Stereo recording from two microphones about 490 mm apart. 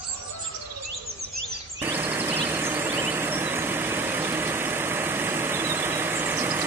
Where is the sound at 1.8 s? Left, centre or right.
Centre.